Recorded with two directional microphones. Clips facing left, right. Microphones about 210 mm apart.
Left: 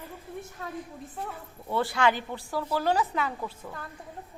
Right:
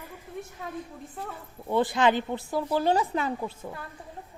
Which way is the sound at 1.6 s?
20° right (ahead or behind).